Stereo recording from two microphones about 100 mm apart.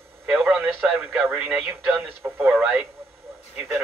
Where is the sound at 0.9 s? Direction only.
15° right (ahead or behind).